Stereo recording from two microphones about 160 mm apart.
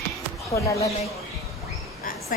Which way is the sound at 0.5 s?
20° left (ahead or behind).